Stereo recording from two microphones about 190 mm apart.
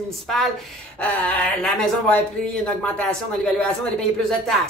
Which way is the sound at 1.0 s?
5° left (ahead or behind).